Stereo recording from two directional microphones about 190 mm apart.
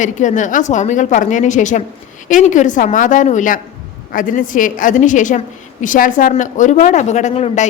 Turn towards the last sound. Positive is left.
turn(degrees=35)  # may be behind; listen again after turning